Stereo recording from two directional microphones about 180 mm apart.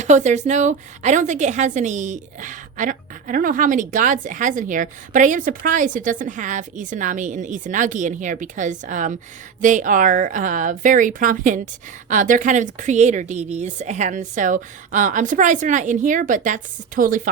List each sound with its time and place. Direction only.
0.0 s a woman's voice: 40° right (ahead or behind)